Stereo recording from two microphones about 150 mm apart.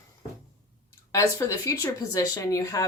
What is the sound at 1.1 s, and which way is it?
Speech, 20° left (ahead or behind).